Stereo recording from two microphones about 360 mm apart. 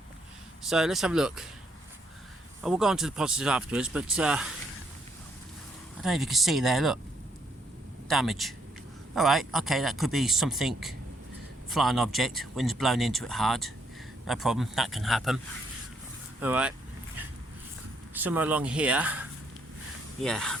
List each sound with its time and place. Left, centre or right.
0.7 s speech: centre
2.6 s speech: centre
6.0 s speech: centre
8.0 s speech: centre
16.4 s speech: centre
18.1 s speech: centre
20.2 s speech: centre